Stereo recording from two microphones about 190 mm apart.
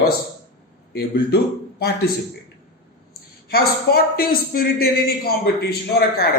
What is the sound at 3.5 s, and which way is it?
A man's voice, 55° left (ahead or behind).